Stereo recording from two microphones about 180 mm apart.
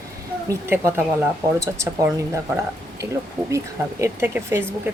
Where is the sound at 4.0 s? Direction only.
10° right (ahead or behind).